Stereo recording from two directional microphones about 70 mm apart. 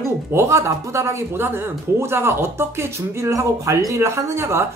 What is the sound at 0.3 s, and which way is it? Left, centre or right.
A man's voice, right.